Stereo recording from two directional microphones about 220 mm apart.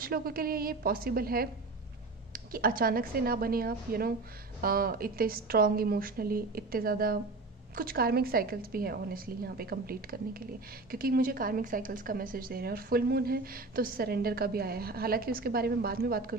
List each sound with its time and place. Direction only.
0.0 s a woman's voice: 40° right (ahead or behind)